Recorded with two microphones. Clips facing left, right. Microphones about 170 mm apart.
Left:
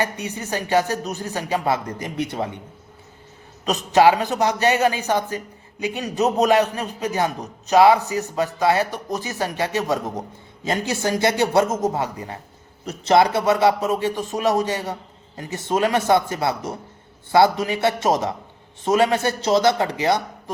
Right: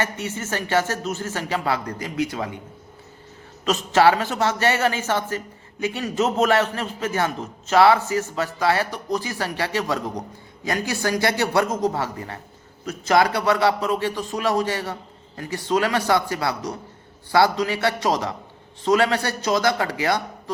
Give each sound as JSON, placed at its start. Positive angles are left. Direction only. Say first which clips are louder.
{"t": 0.0, "sound": "a man's voice", "louder": "left 1 dB", "side_deg": 15}
{"t": 3.7, "sound": "a man's voice", "louder": "left 2 dB", "side_deg": 20}